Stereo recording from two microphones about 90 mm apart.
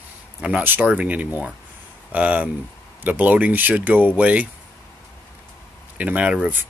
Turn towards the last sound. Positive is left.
turn(degrees=-20)  # may be behind; listen again after turning